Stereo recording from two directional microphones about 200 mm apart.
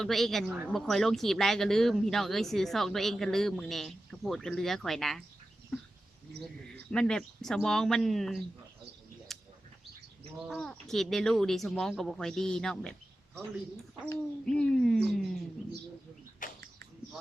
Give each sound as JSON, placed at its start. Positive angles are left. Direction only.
{"t": 0.0, "sound": "speech", "side_deg": 0}
{"t": 6.9, "sound": "speech", "side_deg": 5}
{"t": 9.3, "sound": "bird", "side_deg": 0}
{"t": 10.5, "sound": "speech", "side_deg": 0}
{"t": 14.0, "sound": "speech", "side_deg": 5}
{"t": 16.4, "sound": "bird", "side_deg": 40}